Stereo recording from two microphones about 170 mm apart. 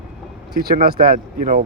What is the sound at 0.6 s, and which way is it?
Speech, 65° right (ahead or behind).